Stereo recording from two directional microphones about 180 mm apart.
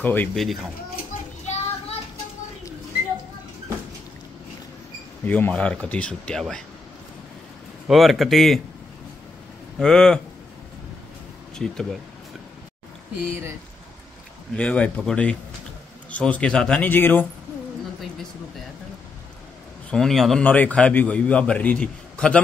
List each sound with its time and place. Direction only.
0.0 s a man's voice: 10° left (ahead or behind)
1.4 s a sound: 40° left (ahead or behind)
5.2 s a man's voice: 10° left (ahead or behind)
7.9 s a man's voice: centre (ahead or behind)
9.8 s a man's voice: 5° left (ahead or behind)
11.5 s speech: 5° left (ahead or behind)
14.5 s speech: 5° left (ahead or behind)
19.9 s a man's voice: centre (ahead or behind)